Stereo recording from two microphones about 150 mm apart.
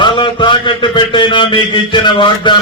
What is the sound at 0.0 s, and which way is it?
A man's voice, 30° left (ahead or behind).